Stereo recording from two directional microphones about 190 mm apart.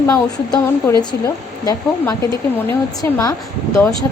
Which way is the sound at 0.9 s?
10° left (ahead or behind).